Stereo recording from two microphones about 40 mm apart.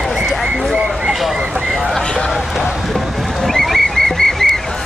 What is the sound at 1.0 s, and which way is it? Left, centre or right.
Speech, centre.